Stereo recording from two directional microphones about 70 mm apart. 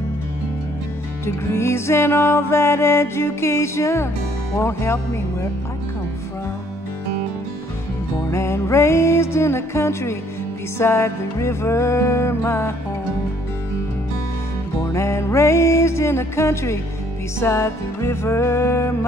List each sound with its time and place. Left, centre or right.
1.2 s music: left
8.3 s music: left
14.9 s music: left